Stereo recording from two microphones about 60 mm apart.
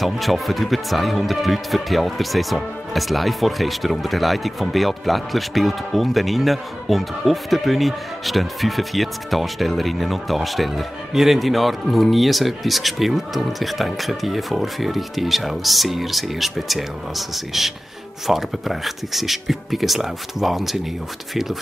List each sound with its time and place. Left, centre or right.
0.0 s speech: centre